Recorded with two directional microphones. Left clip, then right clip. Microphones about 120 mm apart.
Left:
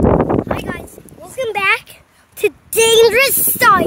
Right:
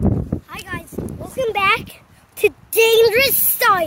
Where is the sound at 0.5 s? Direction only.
15° left (ahead or behind).